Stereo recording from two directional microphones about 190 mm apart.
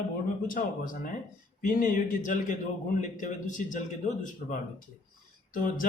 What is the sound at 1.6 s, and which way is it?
A man's voice, 45° left (ahead or behind).